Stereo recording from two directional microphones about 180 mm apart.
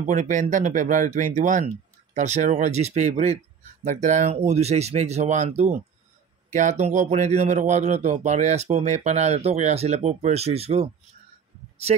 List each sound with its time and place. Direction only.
0.0 s speech: 45° right (ahead or behind)